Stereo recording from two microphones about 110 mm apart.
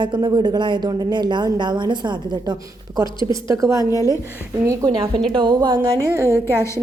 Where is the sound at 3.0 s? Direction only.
30° right (ahead or behind).